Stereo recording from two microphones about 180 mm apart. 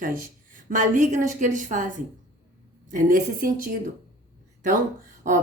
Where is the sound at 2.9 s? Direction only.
50° right (ahead or behind).